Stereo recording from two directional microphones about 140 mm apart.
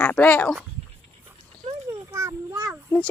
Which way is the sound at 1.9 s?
20° right (ahead or behind).